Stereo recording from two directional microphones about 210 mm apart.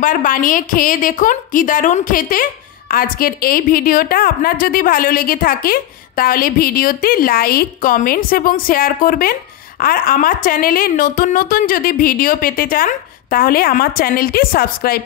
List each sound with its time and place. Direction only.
0.0 s a woman's voice: 40° left (ahead or behind)